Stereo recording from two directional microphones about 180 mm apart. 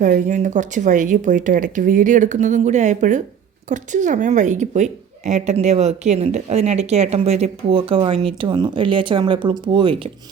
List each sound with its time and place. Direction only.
0.0 s a woman's voice: 45° right (ahead or behind); by 10.1 s 30° right (ahead or behind)